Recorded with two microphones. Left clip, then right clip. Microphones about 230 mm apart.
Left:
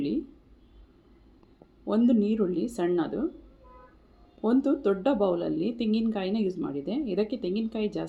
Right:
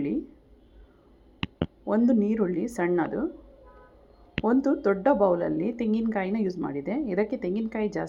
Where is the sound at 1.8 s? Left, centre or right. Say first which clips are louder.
Right 1 dB; centre.